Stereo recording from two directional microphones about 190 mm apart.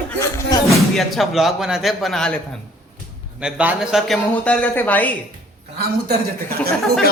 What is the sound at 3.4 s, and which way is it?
Speech, 5° right (ahead or behind).